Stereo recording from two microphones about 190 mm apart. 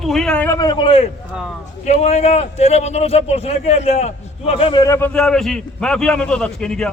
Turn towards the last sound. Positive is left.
turn(degrees=5)  # may be behind; listen again after turning